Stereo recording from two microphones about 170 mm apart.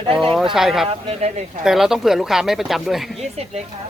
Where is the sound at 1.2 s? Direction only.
45° right (ahead or behind).